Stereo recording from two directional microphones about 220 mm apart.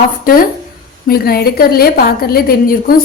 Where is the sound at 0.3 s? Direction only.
40° left (ahead or behind).